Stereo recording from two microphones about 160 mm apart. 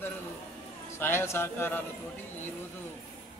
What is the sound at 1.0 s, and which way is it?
Speech, 15° left (ahead or behind).